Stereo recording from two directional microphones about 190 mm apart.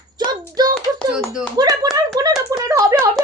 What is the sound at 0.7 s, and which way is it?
Speech, centre (ahead or behind).